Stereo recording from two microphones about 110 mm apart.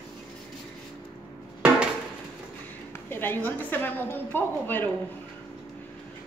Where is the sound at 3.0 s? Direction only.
20° left (ahead or behind).